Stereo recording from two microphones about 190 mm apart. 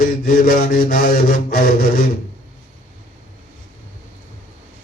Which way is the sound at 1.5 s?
55° left (ahead or behind).